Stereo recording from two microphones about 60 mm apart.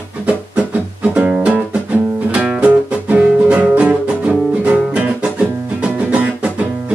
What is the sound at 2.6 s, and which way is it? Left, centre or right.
Music, right.